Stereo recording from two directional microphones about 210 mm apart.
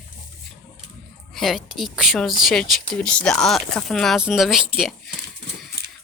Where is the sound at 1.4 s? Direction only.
Centre (ahead or behind).